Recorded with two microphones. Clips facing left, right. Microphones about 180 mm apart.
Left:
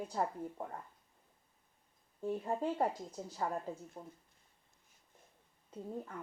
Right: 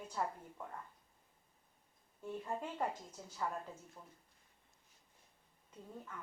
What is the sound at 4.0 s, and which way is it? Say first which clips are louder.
Speech: left 8 dB; 40° left (ahead or behind).